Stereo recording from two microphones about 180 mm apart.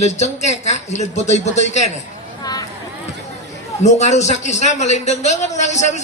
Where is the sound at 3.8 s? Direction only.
40° left (ahead or behind).